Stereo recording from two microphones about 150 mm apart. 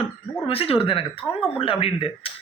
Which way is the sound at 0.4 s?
40° left (ahead or behind).